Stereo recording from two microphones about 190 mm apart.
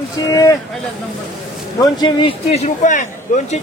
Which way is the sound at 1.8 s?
25° left (ahead or behind).